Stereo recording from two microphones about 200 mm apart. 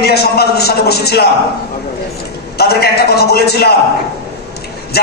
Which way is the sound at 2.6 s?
55° left (ahead or behind).